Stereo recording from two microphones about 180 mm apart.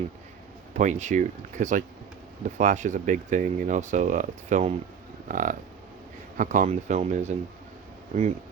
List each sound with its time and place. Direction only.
0.7 s speech: 40° right (ahead or behind)